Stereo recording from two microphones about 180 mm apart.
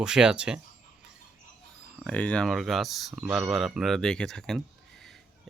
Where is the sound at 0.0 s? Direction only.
5° right (ahead or behind).